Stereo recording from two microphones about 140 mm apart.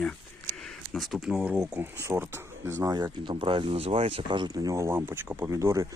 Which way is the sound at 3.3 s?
35° right (ahead or behind).